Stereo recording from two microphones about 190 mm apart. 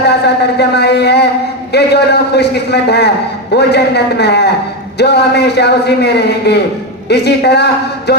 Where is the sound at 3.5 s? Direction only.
60° left (ahead or behind).